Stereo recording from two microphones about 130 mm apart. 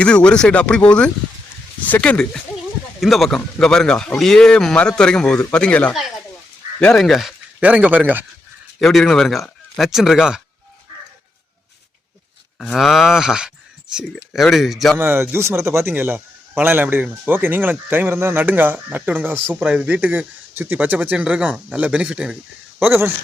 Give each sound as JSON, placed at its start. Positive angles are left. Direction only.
{"t": 0.0, "sound": "speech", "side_deg": 10}
{"t": 7.0, "sound": "speech", "side_deg": 0}
{"t": 7.6, "sound": "a man's voice", "side_deg": -10}
{"t": 8.8, "sound": "speech", "side_deg": 0}
{"t": 12.5, "sound": "speech", "side_deg": 0}
{"t": 14.9, "sound": "a man's voice", "side_deg": -20}
{"t": 22.8, "sound": "a man's voice", "side_deg": -15}